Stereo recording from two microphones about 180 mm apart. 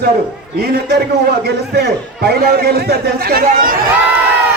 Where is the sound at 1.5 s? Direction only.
65° right (ahead or behind).